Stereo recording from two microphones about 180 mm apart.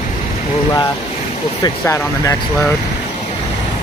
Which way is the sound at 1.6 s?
20° left (ahead or behind).